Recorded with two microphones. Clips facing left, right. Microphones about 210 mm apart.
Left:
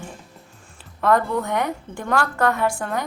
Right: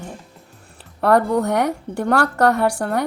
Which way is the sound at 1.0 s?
40° right (ahead or behind).